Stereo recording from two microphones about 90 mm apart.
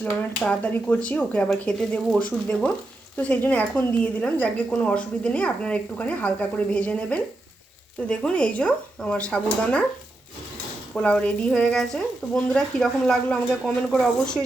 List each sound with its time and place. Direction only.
0.0 s a woman's voice: 15° left (ahead or behind)
10.9 s a woman's voice: 15° left (ahead or behind)